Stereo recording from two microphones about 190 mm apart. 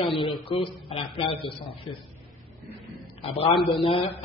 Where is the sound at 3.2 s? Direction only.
30° left (ahead or behind).